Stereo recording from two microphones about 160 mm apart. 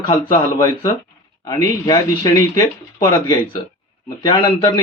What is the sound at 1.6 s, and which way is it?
Speech, 25° left (ahead or behind).